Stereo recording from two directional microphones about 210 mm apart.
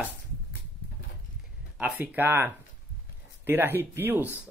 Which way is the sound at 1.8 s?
10° right (ahead or behind).